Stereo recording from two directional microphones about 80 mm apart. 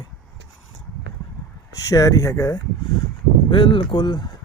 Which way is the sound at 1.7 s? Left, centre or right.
Left.